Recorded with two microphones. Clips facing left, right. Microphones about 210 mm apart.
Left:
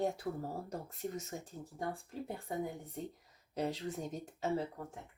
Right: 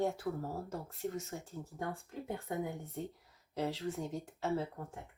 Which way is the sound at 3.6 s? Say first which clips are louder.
Right 1 dB; 15° left (ahead or behind).